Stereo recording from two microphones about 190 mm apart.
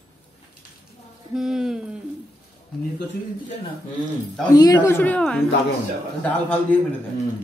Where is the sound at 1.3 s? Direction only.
5° right (ahead or behind).